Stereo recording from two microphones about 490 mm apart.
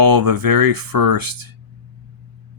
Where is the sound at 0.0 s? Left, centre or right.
Right.